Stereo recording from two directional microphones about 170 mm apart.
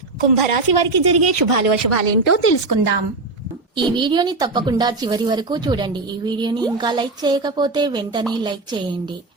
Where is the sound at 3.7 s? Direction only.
25° right (ahead or behind).